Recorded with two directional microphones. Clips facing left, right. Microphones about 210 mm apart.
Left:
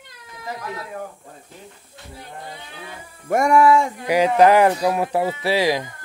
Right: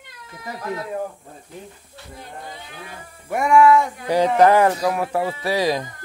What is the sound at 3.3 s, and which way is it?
Speech, 40° left (ahead or behind).